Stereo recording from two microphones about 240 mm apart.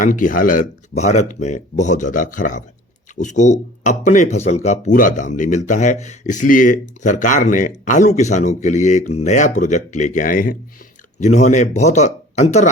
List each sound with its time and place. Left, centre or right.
0.0 s speech: left